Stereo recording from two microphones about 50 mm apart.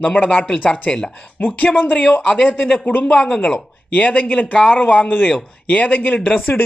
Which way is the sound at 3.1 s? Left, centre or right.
Centre.